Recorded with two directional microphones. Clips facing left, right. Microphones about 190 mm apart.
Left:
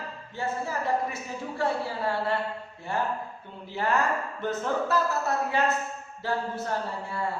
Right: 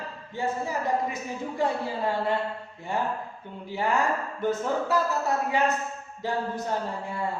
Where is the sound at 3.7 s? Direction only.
15° right (ahead or behind).